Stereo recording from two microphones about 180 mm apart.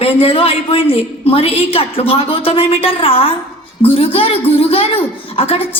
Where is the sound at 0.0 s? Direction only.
35° left (ahead or behind).